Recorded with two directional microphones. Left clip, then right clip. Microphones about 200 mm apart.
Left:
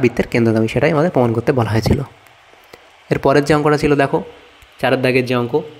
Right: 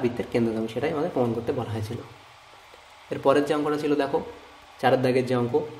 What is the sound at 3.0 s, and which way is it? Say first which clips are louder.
A man's voice: left 8 dB; 45° left (ahead or behind).